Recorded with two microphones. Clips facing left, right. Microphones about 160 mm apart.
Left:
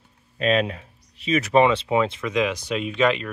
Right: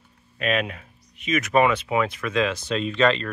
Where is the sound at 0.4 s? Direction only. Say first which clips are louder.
Left 4 dB; 30° left (ahead or behind).